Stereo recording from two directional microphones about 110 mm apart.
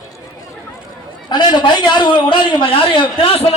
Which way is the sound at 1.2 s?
40° left (ahead or behind).